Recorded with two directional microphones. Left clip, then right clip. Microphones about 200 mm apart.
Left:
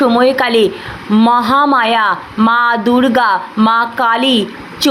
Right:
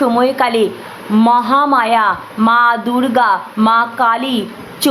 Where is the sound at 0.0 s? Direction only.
10° left (ahead or behind).